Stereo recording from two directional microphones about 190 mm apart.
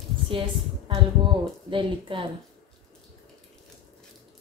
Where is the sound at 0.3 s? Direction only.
30° right (ahead or behind).